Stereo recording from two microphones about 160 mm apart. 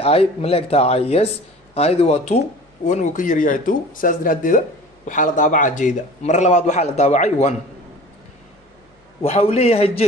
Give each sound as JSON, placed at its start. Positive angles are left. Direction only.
{"t": 0.0, "sound": "speech", "side_deg": 40}
{"t": 9.2, "sound": "speech", "side_deg": 40}